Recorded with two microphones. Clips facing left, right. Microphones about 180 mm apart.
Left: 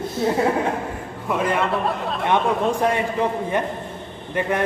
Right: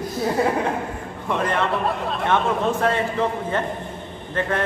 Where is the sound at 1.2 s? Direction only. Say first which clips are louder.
Left 1 dB; 5° left (ahead or behind).